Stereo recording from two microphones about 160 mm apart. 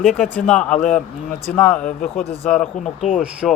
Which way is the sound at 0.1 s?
5° left (ahead or behind).